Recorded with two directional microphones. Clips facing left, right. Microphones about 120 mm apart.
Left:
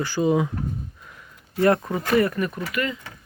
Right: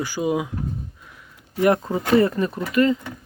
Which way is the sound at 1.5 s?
15° right (ahead or behind).